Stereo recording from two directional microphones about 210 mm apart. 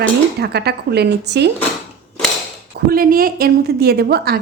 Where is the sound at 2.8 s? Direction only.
45° right (ahead or behind).